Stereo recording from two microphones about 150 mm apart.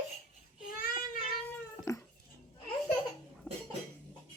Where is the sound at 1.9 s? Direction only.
20° left (ahead or behind).